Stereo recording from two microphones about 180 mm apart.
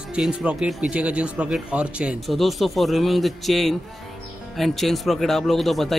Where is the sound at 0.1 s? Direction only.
5° right (ahead or behind).